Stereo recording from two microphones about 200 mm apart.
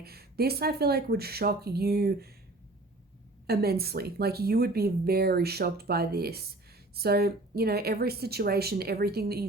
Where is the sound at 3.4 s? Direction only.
50° right (ahead or behind).